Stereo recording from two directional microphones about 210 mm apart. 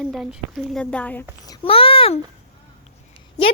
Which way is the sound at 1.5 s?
25° left (ahead or behind).